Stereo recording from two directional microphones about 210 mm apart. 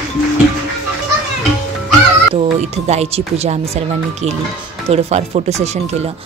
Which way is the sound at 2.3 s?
30° right (ahead or behind).